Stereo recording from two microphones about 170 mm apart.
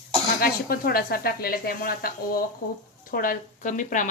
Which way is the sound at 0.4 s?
60° left (ahead or behind).